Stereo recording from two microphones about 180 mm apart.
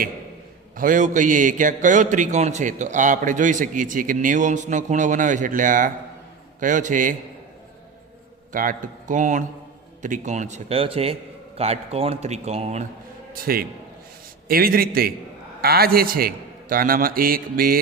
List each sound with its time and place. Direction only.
0.8 s a man's voice: 45° right (ahead or behind)
8.5 s a man's voice: 45° right (ahead or behind)
13.3 s a man's voice: 55° right (ahead or behind)